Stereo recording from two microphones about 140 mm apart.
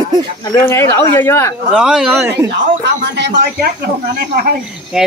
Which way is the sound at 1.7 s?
5° right (ahead or behind).